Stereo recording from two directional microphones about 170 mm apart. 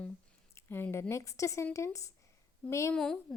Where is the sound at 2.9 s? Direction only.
5° left (ahead or behind).